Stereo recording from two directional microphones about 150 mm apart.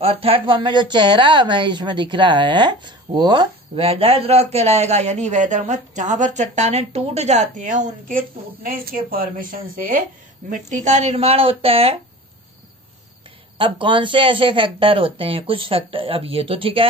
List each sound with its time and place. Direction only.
0.0 s a woman's voice: 40° right (ahead or behind)
3.7 s a man's voice: 40° right (ahead or behind); by 10.0 s 65° right (ahead or behind)
10.5 s a woman's voice: 50° right (ahead or behind)
13.6 s a woman's voice: 35° right (ahead or behind)